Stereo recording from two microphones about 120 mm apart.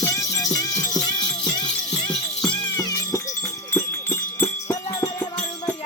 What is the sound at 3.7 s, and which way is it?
Music, 20° left (ahead or behind).